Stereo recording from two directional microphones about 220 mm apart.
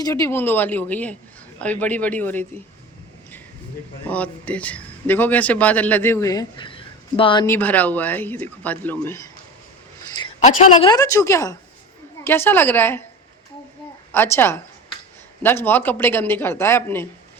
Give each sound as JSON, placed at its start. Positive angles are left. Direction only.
{"t": 0.0, "sound": "a man's voice", "side_deg": 15}
{"t": 4.0, "sound": "a man's voice", "side_deg": 5}
{"t": 7.4, "sound": "a man's voice", "side_deg": 10}
{"t": 10.4, "sound": "a man's voice", "side_deg": 25}
{"t": 14.1, "sound": "a man's voice", "side_deg": 10}